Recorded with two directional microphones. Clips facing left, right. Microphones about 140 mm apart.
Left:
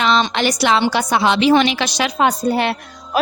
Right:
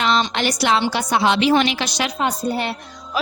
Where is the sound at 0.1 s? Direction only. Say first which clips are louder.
Left 3 dB; 90° left.